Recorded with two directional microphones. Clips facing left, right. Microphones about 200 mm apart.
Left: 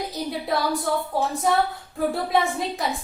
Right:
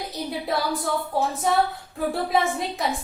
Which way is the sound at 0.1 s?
Centre (ahead or behind).